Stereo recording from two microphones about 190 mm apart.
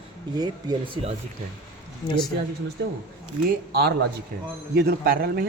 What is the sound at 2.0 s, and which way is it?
Speech, 20° left (ahead or behind).